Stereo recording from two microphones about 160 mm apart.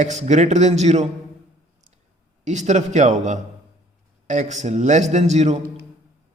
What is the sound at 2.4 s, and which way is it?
A man's voice, 45° right (ahead or behind).